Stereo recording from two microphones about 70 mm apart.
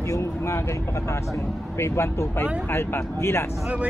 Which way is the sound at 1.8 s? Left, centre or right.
Left.